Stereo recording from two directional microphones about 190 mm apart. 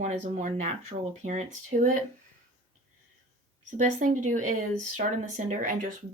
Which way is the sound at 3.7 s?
40° right (ahead or behind).